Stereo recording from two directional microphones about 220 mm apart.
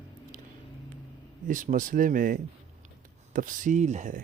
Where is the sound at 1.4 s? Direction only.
35° right (ahead or behind).